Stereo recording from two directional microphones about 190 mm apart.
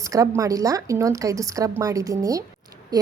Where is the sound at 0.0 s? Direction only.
15° right (ahead or behind).